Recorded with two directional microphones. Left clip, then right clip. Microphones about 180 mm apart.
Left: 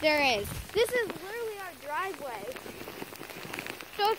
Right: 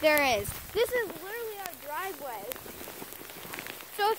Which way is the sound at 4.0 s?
40° right (ahead or behind).